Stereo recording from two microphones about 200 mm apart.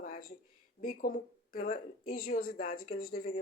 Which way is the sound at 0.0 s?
45° left (ahead or behind).